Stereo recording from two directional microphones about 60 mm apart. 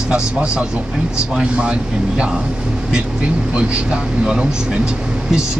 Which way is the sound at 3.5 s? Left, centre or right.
Centre.